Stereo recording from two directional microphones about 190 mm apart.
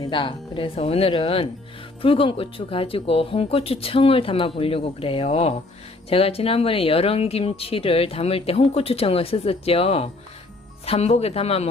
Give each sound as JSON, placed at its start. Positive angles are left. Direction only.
{"t": 0.0, "sound": "speech", "side_deg": 25}